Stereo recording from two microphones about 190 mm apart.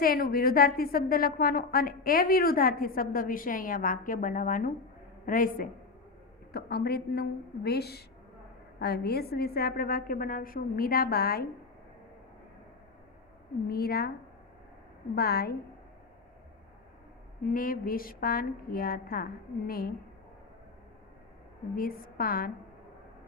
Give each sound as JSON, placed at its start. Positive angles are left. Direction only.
{"t": 0.0, "sound": "a woman's voice", "side_deg": 50}
{"t": 13.7, "sound": "a woman's voice", "side_deg": 55}
{"t": 15.1, "sound": "a woman's voice", "side_deg": 55}
{"t": 17.4, "sound": "a woman's voice", "side_deg": 45}
{"t": 21.8, "sound": "a woman's voice", "side_deg": 50}